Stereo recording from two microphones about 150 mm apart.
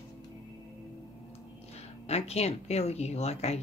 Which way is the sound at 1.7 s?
45° left (ahead or behind).